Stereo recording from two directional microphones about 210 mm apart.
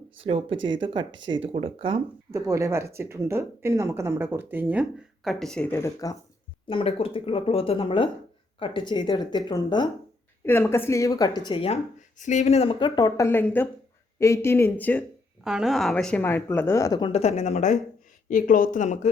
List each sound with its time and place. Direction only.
0.3 s speech: 25° right (ahead or behind)
2.3 s speech: 15° right (ahead or behind); by 6.1 s 15° left (ahead or behind)
6.7 s a woman's voice: 25° left (ahead or behind)